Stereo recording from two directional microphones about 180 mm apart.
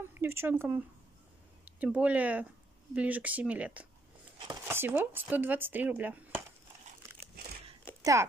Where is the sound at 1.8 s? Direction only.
5° right (ahead or behind).